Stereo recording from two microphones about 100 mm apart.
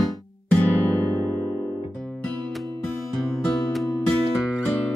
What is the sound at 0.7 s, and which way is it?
Music, 20° left (ahead or behind).